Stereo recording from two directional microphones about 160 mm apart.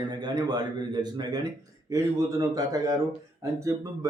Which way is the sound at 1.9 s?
20° right (ahead or behind).